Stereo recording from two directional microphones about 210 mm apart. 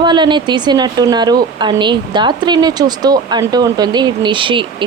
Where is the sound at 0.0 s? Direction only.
20° right (ahead or behind).